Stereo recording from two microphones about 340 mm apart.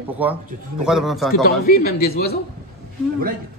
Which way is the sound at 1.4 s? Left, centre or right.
Left.